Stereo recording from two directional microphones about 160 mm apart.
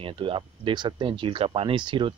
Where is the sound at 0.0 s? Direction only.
35° right (ahead or behind).